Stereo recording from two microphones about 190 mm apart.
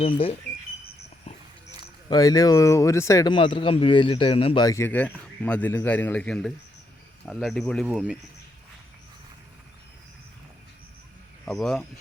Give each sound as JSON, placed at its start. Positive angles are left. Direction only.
{"t": 0.0, "sound": "speech", "side_deg": 30}
{"t": 2.0, "sound": "speech", "side_deg": 20}
{"t": 11.4, "sound": "speech", "side_deg": 0}